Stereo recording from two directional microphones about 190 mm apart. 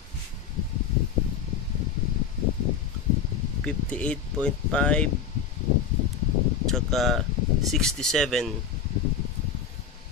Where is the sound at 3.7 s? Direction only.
5° left (ahead or behind).